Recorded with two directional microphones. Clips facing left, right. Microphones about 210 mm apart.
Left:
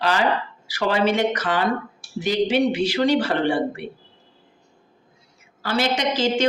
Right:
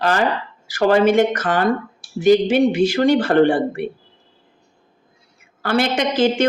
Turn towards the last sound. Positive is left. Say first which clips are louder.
# right 4 dB
turn(degrees=-55)  # may be behind; listen again after turning